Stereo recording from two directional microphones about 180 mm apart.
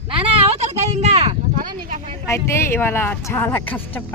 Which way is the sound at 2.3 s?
15° left (ahead or behind).